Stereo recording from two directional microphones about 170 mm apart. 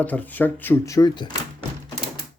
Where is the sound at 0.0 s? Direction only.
10° left (ahead or behind); by 1.3 s 25° left (ahead or behind).